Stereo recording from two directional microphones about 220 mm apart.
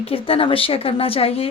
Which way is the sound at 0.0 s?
25° left (ahead or behind).